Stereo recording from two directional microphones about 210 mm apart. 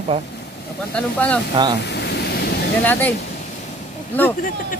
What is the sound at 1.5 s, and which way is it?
Speech, 20° right (ahead or behind).